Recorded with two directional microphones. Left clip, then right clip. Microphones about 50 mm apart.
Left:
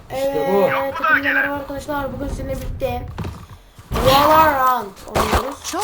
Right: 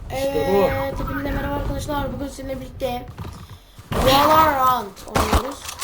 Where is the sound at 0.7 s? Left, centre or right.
Centre.